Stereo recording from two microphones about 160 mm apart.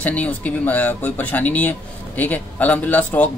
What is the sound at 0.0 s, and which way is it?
Speech, 10° left (ahead or behind).